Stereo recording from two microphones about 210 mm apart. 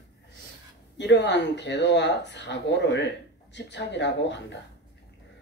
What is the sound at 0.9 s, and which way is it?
Speech, 55° left (ahead or behind).